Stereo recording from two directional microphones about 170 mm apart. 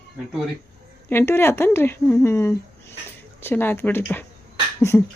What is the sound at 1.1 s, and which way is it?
Speech, 15° left (ahead or behind).